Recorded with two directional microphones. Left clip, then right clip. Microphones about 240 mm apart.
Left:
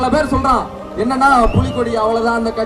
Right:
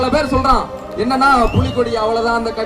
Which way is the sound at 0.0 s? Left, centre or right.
Left.